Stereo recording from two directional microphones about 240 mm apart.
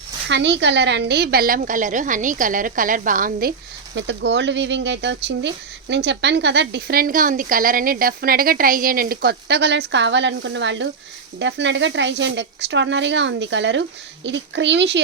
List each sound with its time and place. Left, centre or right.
0.3 s a woman's voice: right
3.9 s a woman's voice: right